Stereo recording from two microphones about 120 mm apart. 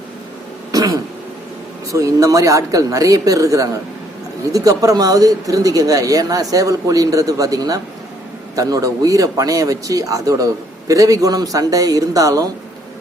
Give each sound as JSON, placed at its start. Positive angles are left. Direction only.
{"t": 0.7, "sound": "throat clearing", "side_deg": -30}
{"t": 1.9, "sound": "speech", "side_deg": -25}